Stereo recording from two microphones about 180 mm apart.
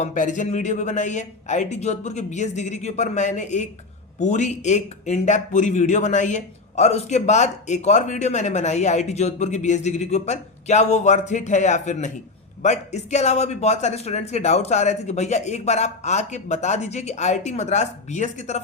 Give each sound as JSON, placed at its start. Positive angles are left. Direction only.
{"t": 0.0, "sound": "a man's voice", "side_deg": 45}